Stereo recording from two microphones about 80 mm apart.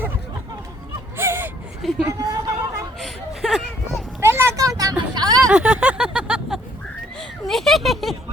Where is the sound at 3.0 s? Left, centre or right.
Centre.